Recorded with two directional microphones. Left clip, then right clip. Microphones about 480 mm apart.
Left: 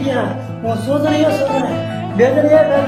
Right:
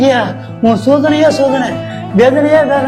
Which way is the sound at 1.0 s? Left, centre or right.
Centre.